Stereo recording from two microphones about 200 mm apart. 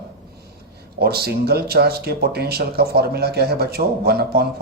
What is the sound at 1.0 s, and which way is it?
Speech, 50° right (ahead or behind).